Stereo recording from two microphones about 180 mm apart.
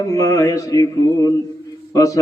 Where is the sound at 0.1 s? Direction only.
20° left (ahead or behind).